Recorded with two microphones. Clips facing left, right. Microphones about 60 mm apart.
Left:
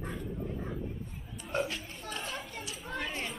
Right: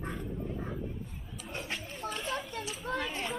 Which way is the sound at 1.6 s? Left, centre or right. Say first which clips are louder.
Right 1 dB; right.